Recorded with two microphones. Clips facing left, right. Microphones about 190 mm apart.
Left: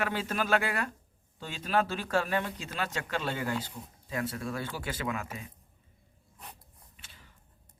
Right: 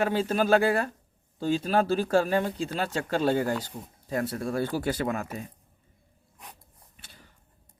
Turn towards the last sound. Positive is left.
turn(degrees=-40)  # may be behind; listen again after turning